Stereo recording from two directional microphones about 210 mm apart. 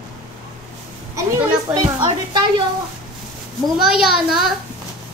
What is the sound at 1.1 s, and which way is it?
Speech, 15° right (ahead or behind).